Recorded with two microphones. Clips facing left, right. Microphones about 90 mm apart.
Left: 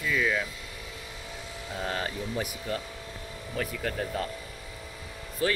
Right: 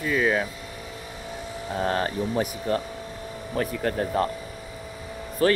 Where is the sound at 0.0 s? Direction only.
40° right (ahead or behind).